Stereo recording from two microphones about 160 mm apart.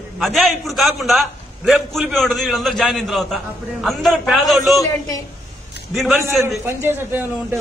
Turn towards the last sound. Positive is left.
turn(degrees=-15)  # may be behind; listen again after turning